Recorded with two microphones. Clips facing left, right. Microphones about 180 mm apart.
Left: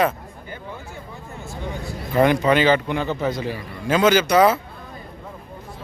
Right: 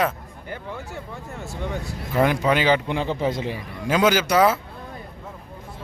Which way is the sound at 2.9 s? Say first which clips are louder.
Left 1 dB; 25° right (ahead or behind).